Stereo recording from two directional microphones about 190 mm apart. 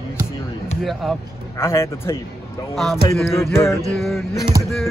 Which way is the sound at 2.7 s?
Centre (ahead or behind).